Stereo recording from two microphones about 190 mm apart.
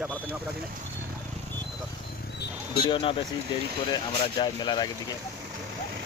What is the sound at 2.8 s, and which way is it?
Speech, 25° left (ahead or behind).